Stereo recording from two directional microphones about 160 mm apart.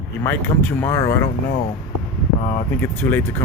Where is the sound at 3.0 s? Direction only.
15° left (ahead or behind).